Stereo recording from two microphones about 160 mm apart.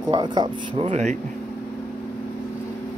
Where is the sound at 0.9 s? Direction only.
45° right (ahead or behind).